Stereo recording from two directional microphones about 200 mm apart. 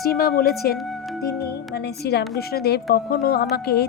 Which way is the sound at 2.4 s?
50° left (ahead or behind).